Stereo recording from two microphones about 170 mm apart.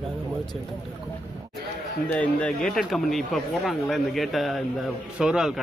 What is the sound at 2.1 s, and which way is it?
Speech, 10° left (ahead or behind).